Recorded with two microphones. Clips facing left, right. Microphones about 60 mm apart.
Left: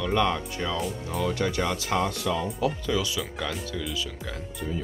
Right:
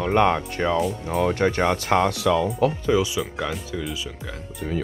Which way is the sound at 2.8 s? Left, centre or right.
Right.